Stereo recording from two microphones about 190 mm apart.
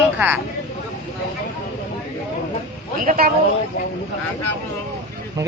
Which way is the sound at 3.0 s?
50° right (ahead or behind).